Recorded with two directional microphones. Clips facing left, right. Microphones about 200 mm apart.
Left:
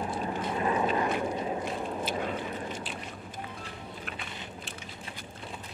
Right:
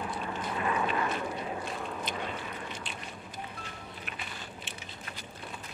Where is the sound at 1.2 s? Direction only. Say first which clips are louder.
Left 4 dB; 25° left (ahead or behind).